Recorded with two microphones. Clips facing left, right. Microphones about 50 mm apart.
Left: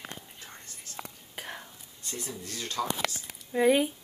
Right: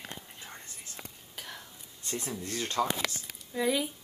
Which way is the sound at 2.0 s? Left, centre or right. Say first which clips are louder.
Right 3 dB; right.